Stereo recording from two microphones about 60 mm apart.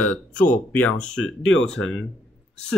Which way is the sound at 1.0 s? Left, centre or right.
Centre.